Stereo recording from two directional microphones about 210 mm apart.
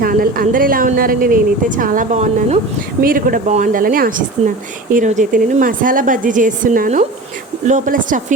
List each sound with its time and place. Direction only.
0.0 s a woman's voice: 45° right (ahead or behind)